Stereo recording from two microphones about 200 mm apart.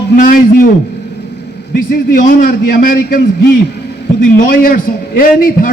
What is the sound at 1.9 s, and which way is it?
A man's voice, 45° left (ahead or behind).